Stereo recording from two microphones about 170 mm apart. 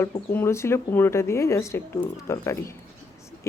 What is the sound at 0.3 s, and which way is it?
Speech, 15° left (ahead or behind).